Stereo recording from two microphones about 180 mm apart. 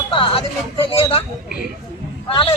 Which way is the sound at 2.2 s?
30° left (ahead or behind).